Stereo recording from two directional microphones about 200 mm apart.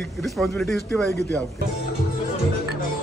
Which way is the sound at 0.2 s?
Centre (ahead or behind).